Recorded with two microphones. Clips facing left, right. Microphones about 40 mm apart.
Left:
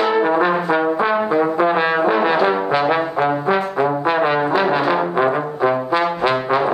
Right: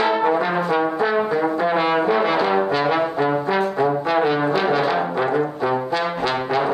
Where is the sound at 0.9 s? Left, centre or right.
Left.